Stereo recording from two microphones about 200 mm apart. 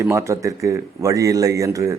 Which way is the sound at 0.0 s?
15° right (ahead or behind).